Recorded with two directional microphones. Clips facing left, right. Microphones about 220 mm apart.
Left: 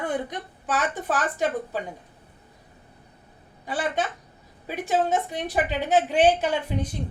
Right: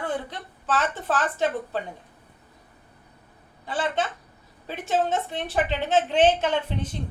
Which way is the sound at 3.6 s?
15° left (ahead or behind).